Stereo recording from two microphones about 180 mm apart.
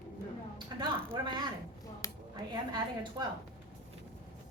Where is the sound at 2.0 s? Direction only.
15° left (ahead or behind).